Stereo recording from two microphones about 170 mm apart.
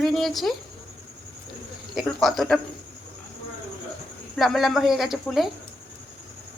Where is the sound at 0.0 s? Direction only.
Centre (ahead or behind).